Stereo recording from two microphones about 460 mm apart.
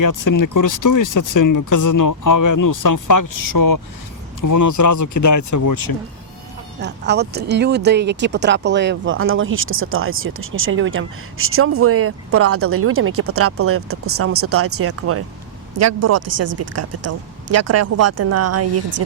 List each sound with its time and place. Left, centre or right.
0.0 s speech: left
6.7 s speech: right